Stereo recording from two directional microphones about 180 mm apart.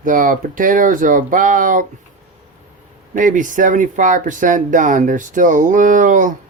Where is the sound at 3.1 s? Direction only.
45° right (ahead or behind).